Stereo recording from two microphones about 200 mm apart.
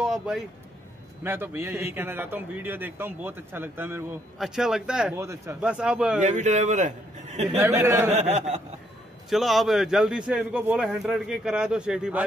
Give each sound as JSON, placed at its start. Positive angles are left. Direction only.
{"t": 0.0, "sound": "a sound", "side_deg": 0}
{"t": 1.2, "sound": "a man's voice", "side_deg": -10}
{"t": 5.2, "sound": "a man's voice", "side_deg": -15}
{"t": 6.2, "sound": "a man's voice", "side_deg": -35}
{"t": 7.5, "sound": "a man's voice", "side_deg": -10}
{"t": 8.1, "sound": "a man's voice", "side_deg": -35}
{"t": 9.3, "sound": "a man's voice", "side_deg": 0}